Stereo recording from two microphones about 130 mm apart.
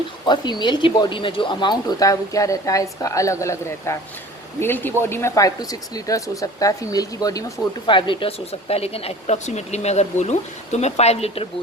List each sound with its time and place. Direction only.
0.3 s speech: 35° left (ahead or behind)
7.9 s speech: 40° left (ahead or behind)